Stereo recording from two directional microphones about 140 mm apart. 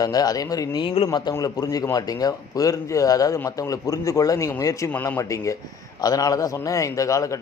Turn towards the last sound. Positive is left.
turn(degrees=25)  # may be behind; listen again after turning